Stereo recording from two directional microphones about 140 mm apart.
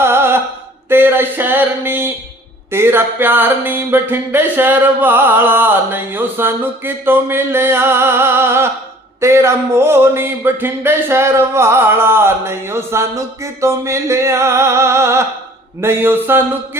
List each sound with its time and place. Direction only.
0.0 s music: 15° right (ahead or behind)
0.9 s speech: 15° right (ahead or behind)
9.2 s a sound: 20° right (ahead or behind)
15.8 s speech: 15° right (ahead or behind)